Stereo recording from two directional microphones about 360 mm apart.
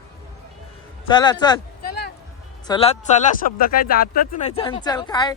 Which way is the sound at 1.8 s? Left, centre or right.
Left.